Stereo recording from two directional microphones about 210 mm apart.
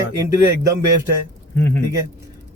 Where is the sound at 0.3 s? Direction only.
15° right (ahead or behind).